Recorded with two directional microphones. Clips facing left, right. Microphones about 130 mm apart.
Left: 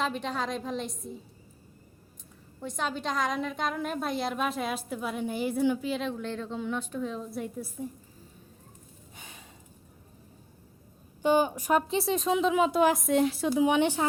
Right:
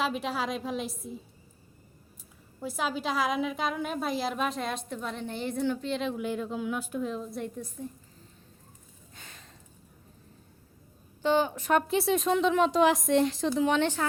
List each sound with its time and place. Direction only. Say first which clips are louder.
0.0 s a woman's voice: right 1 dB; 5° right (ahead or behind)
2.6 s a woman's voice: right 1 dB; 5° right (ahead or behind)
9.1 s a sound: left 1 dB; 15° left (ahead or behind)
11.2 s a woman's voice: left 1 dB; 15° left (ahead or behind)